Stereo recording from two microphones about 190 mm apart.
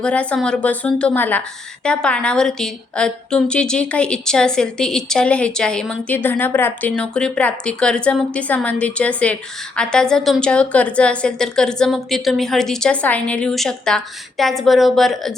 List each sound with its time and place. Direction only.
0.0 s a woman's voice: 5° left (ahead or behind)